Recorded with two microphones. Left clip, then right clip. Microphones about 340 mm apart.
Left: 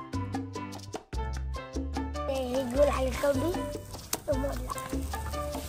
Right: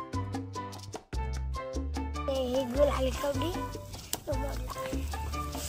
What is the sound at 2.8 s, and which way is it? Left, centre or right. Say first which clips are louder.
Music: left 3 dB; right.